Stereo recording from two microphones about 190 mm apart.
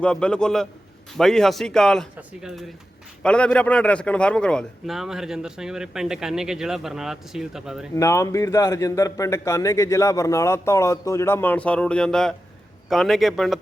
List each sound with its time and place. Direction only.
0.0 s a man's voice: 5° left (ahead or behind)
7.9 s a man's voice: 15° left (ahead or behind); by 13.6 s centre (ahead or behind)